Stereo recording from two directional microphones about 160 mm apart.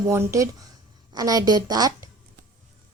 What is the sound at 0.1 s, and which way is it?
A woman's voice, 20° right (ahead or behind).